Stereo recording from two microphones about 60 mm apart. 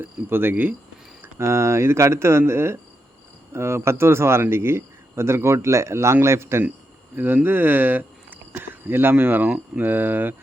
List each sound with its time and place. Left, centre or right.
0.0 s speech: right
1.4 s speech: right
7.4 s speech: right